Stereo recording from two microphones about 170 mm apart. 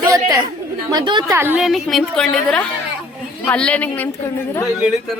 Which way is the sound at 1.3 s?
15° right (ahead or behind).